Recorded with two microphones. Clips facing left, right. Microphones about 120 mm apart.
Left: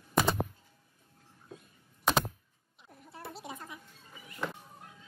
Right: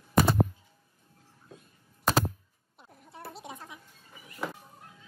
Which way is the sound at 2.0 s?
5° right (ahead or behind).